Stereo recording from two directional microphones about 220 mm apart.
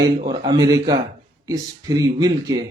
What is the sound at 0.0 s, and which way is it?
Speech, 20° right (ahead or behind).